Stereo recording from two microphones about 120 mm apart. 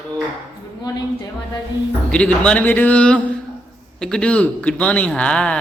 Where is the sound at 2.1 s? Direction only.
10° left (ahead or behind).